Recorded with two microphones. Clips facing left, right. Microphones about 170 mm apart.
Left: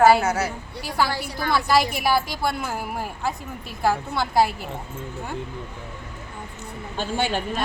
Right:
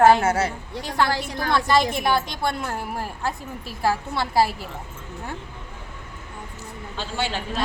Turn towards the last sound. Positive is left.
turn(degrees=50)  # may be behind; listen again after turning